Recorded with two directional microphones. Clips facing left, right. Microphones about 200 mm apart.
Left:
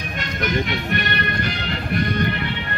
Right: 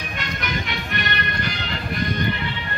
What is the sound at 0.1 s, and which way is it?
Music, 45° left (ahead or behind).